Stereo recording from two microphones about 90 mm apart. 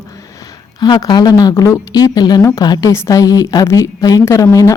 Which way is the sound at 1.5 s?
30° left (ahead or behind).